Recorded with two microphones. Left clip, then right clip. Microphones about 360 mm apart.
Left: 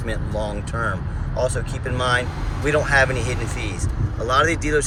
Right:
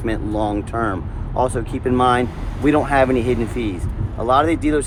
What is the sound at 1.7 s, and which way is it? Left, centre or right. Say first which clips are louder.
Speech: right 8 dB; centre.